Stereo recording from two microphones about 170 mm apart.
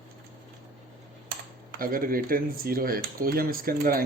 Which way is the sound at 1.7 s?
55° right (ahead or behind).